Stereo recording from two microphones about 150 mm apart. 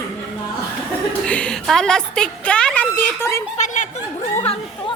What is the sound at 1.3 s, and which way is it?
A woman's voice, 5° left (ahead or behind).